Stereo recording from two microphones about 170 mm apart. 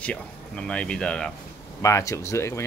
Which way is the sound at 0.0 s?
5° left (ahead or behind).